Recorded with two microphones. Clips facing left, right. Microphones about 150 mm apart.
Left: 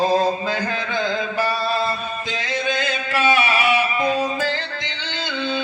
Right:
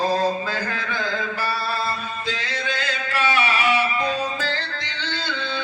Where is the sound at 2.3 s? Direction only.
15° left (ahead or behind).